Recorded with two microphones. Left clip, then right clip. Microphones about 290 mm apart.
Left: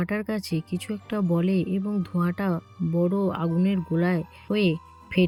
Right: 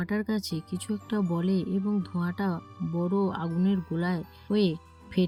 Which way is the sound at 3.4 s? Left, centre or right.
Left.